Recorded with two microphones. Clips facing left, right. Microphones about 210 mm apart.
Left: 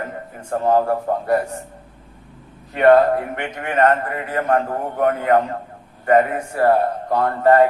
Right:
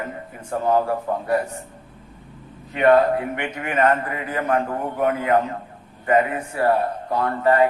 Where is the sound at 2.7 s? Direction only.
45° left (ahead or behind).